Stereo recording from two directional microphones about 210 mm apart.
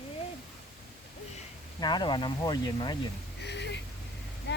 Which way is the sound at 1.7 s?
20° left (ahead or behind).